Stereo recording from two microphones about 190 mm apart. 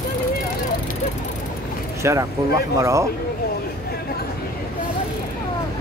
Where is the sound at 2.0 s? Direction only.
15° right (ahead or behind).